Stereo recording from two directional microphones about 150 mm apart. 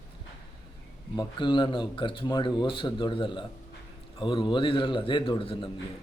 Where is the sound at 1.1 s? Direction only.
30° left (ahead or behind).